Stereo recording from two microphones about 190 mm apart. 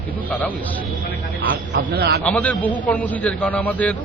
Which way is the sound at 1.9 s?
60° right (ahead or behind).